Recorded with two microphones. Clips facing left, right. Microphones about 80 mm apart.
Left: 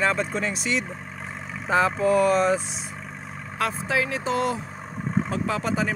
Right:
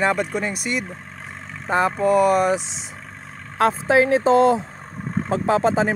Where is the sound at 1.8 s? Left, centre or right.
Centre.